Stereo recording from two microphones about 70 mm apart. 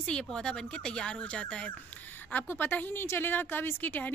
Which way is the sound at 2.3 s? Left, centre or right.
Left.